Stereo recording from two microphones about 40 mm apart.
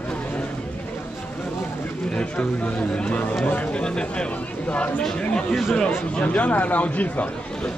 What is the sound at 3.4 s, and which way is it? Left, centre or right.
Speech, left.